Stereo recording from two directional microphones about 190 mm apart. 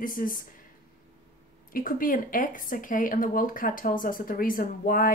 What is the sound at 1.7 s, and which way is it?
Speech, 50° left (ahead or behind).